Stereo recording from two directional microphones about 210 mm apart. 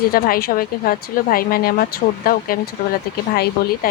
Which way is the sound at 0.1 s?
45° left (ahead or behind).